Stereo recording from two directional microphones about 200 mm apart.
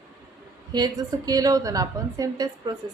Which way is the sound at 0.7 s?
20° right (ahead or behind).